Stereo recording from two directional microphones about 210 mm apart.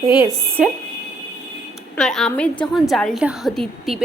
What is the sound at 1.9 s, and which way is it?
A woman's voice, 5° left (ahead or behind).